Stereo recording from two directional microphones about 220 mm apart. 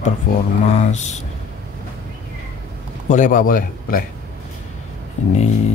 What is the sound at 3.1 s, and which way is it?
Speech, 35° left (ahead or behind).